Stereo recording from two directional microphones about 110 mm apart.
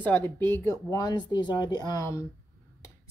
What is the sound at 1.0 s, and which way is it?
Speech, 40° left (ahead or behind).